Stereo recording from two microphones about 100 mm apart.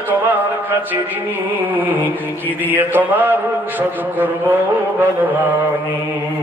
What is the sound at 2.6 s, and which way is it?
Mantra, 20° right (ahead or behind).